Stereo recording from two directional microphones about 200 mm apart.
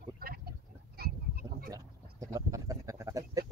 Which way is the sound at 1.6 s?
15° right (ahead or behind).